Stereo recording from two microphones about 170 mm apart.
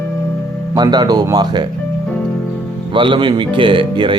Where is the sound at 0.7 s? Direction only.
25° right (ahead or behind).